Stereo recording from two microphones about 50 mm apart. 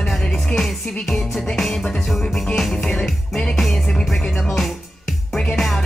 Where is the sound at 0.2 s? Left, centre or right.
Centre.